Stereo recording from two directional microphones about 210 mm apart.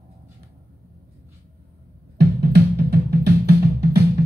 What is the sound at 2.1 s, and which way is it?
Music, 50° right (ahead or behind).